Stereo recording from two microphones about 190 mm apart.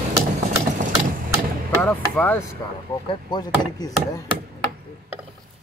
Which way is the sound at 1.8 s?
10° left (ahead or behind).